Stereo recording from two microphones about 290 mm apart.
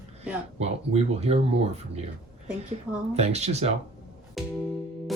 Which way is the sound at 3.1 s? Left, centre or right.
Right.